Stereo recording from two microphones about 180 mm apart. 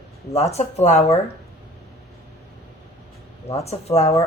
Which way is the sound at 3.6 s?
35° left (ahead or behind).